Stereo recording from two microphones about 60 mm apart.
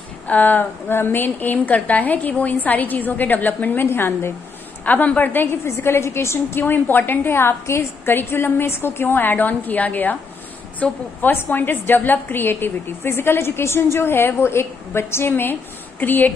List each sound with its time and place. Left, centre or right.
0.3 s a woman's voice: left
3.8 s a woman's voice: left
4.8 s a woman's voice: left
5.7 s a woman's voice: left